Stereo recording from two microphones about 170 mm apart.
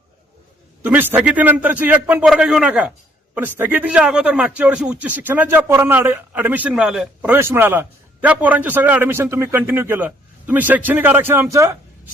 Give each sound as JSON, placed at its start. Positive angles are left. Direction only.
{"t": 0.8, "sound": "speech", "side_deg": -10}